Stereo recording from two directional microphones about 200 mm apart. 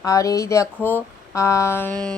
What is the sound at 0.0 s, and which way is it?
Speech, 15° left (ahead or behind).